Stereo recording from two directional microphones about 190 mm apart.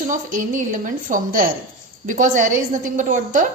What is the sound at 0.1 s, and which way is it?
A woman's voice, 45° right (ahead or behind).